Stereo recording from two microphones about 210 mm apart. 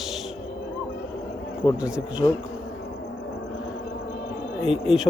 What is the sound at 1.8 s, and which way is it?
Speech, 5° right (ahead or behind).